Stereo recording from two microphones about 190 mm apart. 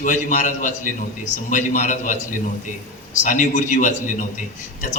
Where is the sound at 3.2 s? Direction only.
40° left (ahead or behind).